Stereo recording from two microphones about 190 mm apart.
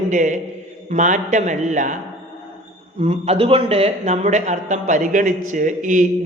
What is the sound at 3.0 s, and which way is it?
A man's voice, 35° right (ahead or behind).